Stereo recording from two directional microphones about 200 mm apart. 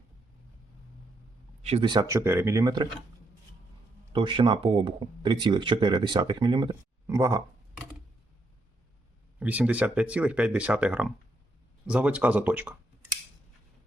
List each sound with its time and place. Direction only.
1.6 s speech: 25° right (ahead or behind)
4.1 s speech: 25° right (ahead or behind)
9.4 s speech: 5° right (ahead or behind)